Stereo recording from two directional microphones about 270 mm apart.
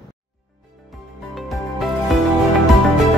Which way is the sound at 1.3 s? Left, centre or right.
Centre.